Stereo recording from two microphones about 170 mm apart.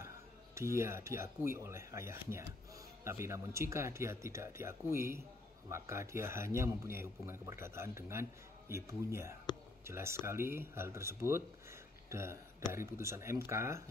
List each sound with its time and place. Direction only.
0.6 s a man's voice: 15° right (ahead or behind)